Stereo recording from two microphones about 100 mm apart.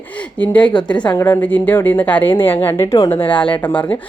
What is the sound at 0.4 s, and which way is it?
Speech, 15° left (ahead or behind).